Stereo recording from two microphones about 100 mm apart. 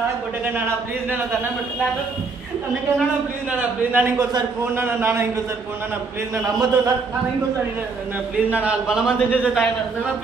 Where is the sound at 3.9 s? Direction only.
25° right (ahead or behind).